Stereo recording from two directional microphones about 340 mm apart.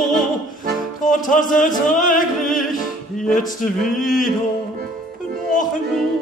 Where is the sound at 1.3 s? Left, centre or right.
Left.